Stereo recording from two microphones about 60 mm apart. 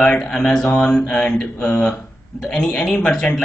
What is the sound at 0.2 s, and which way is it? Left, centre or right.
Speech, centre.